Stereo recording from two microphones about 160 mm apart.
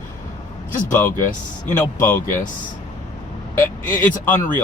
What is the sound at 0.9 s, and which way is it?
Speech, 15° left (ahead or behind).